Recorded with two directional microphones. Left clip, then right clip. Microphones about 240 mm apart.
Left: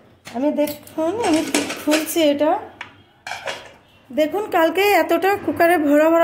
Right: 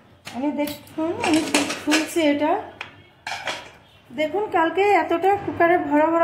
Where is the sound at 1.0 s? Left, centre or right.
Left.